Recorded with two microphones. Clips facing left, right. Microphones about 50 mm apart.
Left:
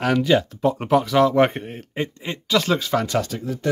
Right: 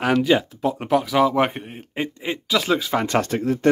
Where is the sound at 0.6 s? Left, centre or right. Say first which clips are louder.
Left 2 dB; centre.